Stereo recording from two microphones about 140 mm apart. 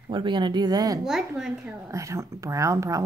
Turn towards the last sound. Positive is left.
turn(degrees=-20)  # may be behind; listen again after turning